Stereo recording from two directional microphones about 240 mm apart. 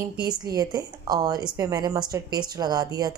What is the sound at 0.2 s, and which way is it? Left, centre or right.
Speech, centre.